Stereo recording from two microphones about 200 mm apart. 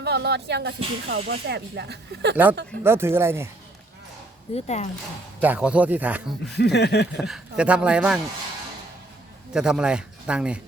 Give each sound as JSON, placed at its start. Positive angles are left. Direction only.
{"t": 0.0, "sound": "speech", "side_deg": -55}
{"t": 2.3, "sound": "speech", "side_deg": -10}
{"t": 4.5, "sound": "speech", "side_deg": 35}
{"t": 5.4, "sound": "speech", "side_deg": -5}
{"t": 6.5, "sound": "speech", "side_deg": 55}
{"t": 7.2, "sound": "speech", "side_deg": 0}
{"t": 9.5, "sound": "speech", "side_deg": -5}